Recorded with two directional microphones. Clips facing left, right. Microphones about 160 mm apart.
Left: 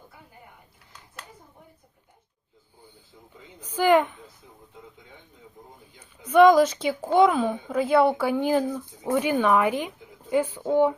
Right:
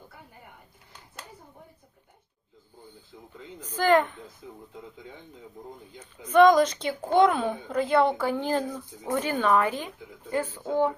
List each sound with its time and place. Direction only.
3.6 s speech: 10° left (ahead or behind)
6.0 s speech: 10° left (ahead or behind)